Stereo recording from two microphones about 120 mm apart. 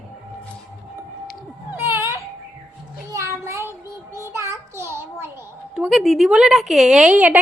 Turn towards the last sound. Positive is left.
turn(degrees=0)  # may be behind; listen again after turning